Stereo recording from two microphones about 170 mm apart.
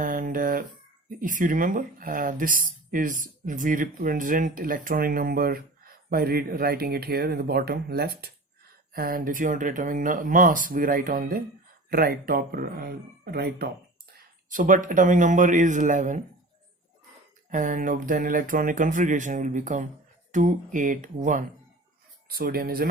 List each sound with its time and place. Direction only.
0.0 s a sound: 55° right (ahead or behind)
1.2 s speech: 50° right (ahead or behind)
14.5 s speech: 50° right (ahead or behind)
17.5 s speech: 50° right (ahead or behind)
22.3 s speech: 60° right (ahead or behind)